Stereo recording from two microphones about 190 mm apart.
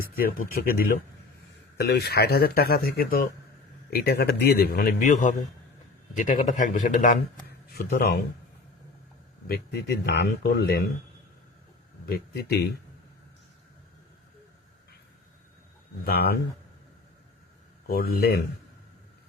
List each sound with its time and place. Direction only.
0.0 s a man's voice: 50° left (ahead or behind)
7.7 s a man's voice: 55° left (ahead or behind)
9.5 s a man's voice: 55° left (ahead or behind)
12.0 s a man's voice: 55° left (ahead or behind)
16.0 s speech: 55° left (ahead or behind)
17.8 s speech: 55° left (ahead or behind)